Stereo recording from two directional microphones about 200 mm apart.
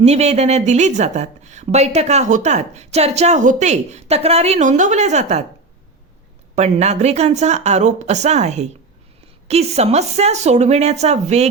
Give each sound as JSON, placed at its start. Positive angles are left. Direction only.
{"t": 0.0, "sound": "a woman's voice", "side_deg": -35}
{"t": 6.6, "sound": "a woman's voice", "side_deg": -35}